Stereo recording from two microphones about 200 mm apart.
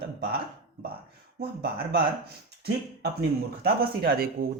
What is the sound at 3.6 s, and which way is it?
Speech, 50° right (ahead or behind).